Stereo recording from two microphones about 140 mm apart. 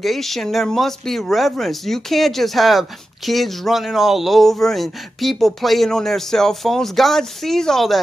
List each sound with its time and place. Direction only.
0.0 s speech: centre (ahead or behind)